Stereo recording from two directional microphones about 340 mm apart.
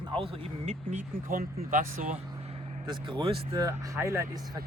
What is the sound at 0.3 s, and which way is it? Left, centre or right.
Speech, centre.